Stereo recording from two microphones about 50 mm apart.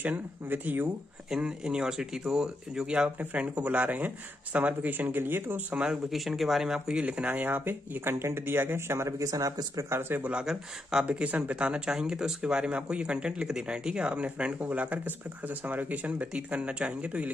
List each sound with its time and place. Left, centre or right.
0.5 s speech: right
1.3 s speech: centre
3.2 s speech: right
6.1 s speech: centre
6.9 s speech: right
7.4 s speech: right
9.9 s speech: right
10.4 s speech: centre
11.1 s speech: right
16.1 s speech: right